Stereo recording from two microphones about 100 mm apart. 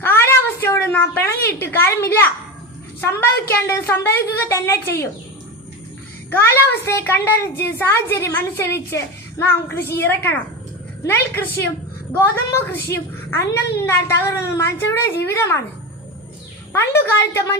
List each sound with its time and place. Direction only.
0.0 s a woman's voice: 25° left (ahead or behind)
6.3 s a child's voice: 25° left (ahead or behind)
16.7 s a child's voice: 25° left (ahead or behind)